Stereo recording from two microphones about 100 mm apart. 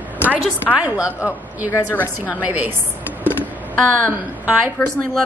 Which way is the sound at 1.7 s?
20° left (ahead or behind).